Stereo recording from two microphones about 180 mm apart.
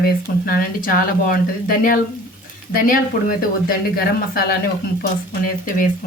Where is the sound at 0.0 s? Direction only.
55° left (ahead or behind).